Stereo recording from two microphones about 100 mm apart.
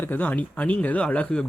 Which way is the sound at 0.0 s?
15° left (ahead or behind).